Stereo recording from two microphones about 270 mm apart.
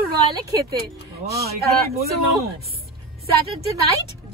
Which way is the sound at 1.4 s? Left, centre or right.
Right.